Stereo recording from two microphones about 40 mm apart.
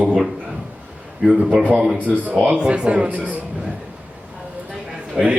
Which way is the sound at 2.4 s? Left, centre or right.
Right.